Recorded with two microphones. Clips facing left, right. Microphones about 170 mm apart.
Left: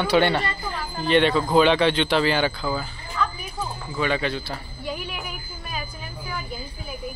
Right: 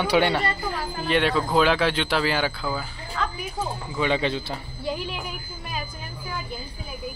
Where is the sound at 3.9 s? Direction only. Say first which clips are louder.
Right 1 dB; 20° right (ahead or behind).